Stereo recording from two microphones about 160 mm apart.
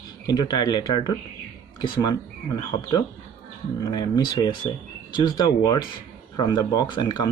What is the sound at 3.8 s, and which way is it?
Speech, 25° left (ahead or behind).